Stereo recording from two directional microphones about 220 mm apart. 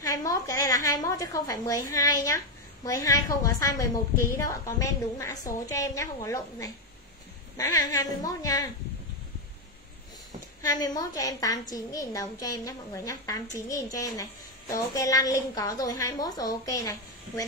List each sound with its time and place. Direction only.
0.0 s a woman's voice: 15° left (ahead or behind)
10.6 s a woman's voice: 15° left (ahead or behind)